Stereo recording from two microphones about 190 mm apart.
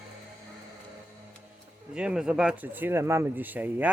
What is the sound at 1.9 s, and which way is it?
Speech, 5° right (ahead or behind).